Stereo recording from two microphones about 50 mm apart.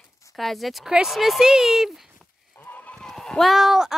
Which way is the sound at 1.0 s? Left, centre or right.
Centre.